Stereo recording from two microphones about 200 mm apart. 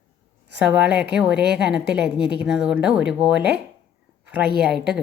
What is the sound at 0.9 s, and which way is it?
Speech, 55° right (ahead or behind).